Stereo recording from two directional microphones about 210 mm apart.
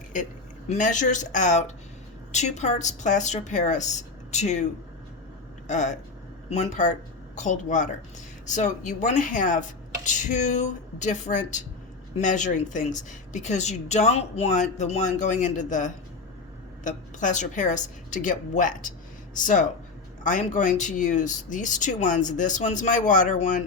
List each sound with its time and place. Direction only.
0.7 s a woman's voice: 35° left (ahead or behind)